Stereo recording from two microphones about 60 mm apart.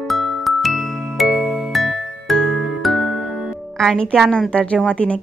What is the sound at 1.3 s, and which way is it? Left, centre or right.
Music, centre.